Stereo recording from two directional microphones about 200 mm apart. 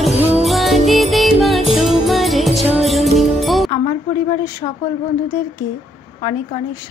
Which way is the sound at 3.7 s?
25° left (ahead or behind).